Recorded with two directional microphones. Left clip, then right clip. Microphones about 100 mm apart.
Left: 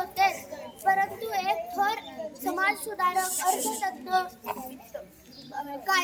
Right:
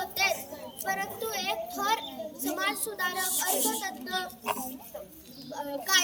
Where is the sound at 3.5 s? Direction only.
70° right (ahead or behind).